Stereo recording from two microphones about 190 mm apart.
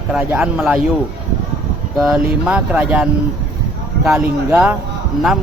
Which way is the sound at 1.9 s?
5° right (ahead or behind).